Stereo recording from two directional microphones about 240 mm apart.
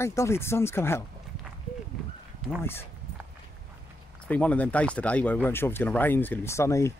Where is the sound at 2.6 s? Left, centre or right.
Centre.